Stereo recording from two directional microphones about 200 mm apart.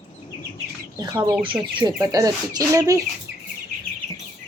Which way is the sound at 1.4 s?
25° right (ahead or behind).